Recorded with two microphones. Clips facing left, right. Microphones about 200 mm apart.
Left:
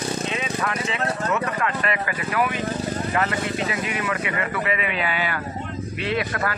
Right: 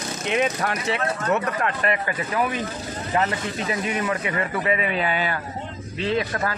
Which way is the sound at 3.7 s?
35° right (ahead or behind).